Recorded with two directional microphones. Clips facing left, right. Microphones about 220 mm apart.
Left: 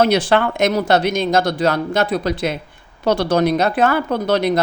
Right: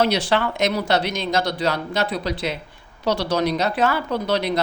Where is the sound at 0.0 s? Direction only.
50° left (ahead or behind).